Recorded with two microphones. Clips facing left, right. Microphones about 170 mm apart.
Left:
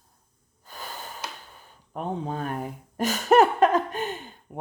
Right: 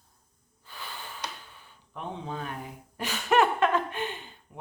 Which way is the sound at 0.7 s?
45° left (ahead or behind).